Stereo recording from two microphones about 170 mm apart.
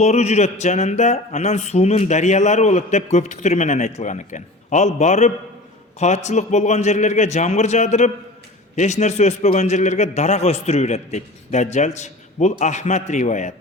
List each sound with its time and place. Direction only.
0.0 s speech: 40° left (ahead or behind)